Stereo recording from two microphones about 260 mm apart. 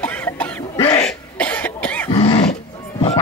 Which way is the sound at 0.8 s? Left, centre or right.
Centre.